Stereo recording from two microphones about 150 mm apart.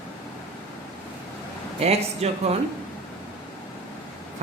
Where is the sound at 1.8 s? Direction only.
45° right (ahead or behind).